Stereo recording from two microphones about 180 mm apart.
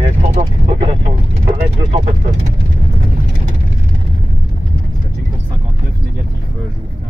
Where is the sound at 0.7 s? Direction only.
30° right (ahead or behind).